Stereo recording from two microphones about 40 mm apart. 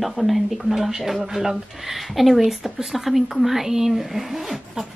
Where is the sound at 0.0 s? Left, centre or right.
Centre.